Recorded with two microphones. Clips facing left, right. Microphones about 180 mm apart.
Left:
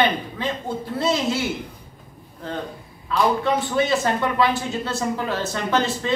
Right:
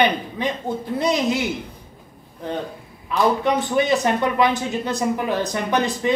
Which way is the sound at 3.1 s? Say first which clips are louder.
Right 1 dB; 20° right (ahead or behind).